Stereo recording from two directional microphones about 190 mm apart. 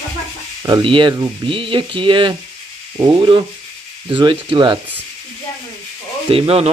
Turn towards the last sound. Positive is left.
turn(degrees=-30)  # may be behind; listen again after turning